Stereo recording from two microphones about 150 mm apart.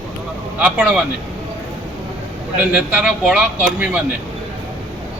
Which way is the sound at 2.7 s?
10° right (ahead or behind).